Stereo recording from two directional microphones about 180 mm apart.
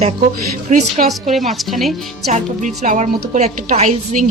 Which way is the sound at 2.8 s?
45° right (ahead or behind).